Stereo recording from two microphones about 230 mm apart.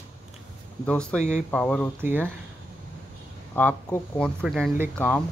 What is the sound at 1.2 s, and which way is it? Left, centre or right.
Speech, left.